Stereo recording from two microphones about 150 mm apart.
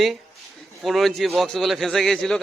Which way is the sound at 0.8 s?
Centre (ahead or behind).